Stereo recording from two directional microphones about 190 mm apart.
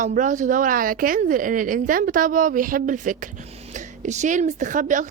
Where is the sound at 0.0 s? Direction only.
45° right (ahead or behind).